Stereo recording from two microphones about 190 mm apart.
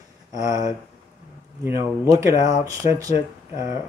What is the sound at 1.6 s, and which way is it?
Speech, 15° right (ahead or behind).